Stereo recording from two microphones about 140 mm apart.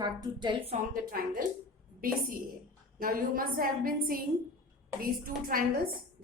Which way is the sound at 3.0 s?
90° right.